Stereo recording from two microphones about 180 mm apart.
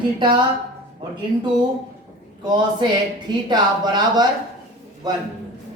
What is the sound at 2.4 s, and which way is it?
Speech, 25° right (ahead or behind).